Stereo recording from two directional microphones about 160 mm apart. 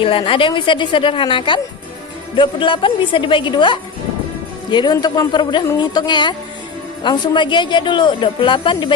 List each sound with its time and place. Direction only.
0.0 s a woman's voice: 35° left (ahead or behind)